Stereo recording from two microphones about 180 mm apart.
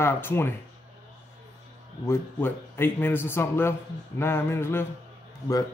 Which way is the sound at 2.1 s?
15° left (ahead or behind).